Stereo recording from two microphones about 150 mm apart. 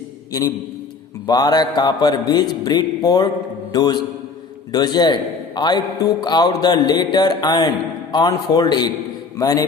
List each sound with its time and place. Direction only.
0.3 s a man's voice: 25° left (ahead or behind)
3.7 s mantra: 25° left (ahead or behind)
4.7 s a man's voice: 25° left (ahead or behind)